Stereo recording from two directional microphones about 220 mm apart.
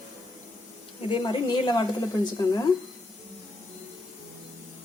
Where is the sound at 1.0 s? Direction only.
25° left (ahead or behind).